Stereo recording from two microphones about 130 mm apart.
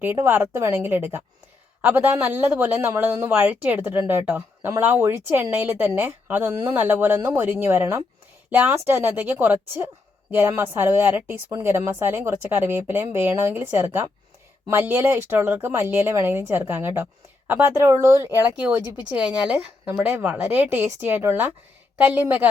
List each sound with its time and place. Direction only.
0.0 s speech: 15° right (ahead or behind)